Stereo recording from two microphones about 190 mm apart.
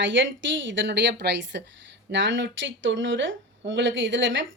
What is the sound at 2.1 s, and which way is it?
Speech, 75° right (ahead or behind).